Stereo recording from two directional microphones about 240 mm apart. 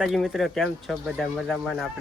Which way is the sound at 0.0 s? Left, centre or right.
Centre.